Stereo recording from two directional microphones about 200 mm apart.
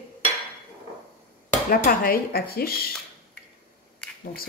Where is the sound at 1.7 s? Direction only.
45° left (ahead or behind).